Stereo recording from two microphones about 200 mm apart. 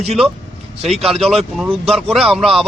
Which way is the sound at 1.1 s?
Centre (ahead or behind).